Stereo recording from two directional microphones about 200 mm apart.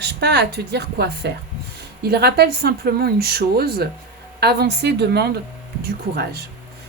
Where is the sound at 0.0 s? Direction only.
55° right (ahead or behind).